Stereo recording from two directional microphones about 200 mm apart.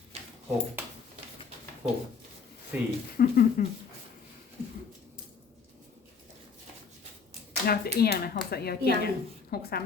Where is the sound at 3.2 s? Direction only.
45° left (ahead or behind).